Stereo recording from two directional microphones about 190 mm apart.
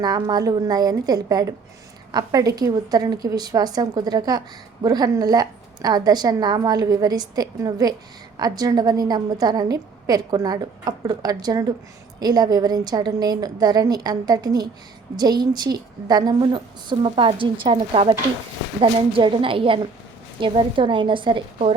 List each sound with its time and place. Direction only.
0.0 s a woman's voice: 20° right (ahead or behind)